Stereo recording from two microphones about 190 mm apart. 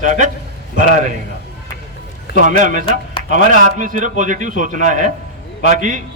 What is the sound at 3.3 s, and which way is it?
A man's voice, 45° right (ahead or behind).